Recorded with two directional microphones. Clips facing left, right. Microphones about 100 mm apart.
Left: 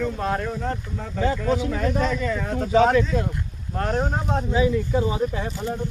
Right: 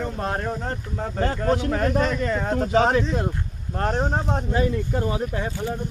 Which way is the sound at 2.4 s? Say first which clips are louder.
Right 3 dB; 45° right (ahead or behind).